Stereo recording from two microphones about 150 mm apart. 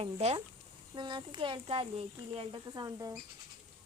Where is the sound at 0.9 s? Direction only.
30° right (ahead or behind).